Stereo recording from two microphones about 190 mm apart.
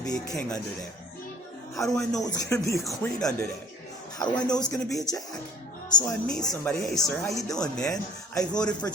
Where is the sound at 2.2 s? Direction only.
20° left (ahead or behind).